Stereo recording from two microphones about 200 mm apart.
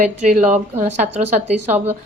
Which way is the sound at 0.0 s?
35° right (ahead or behind).